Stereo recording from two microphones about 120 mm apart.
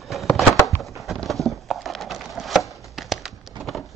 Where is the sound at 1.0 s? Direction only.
Centre (ahead or behind).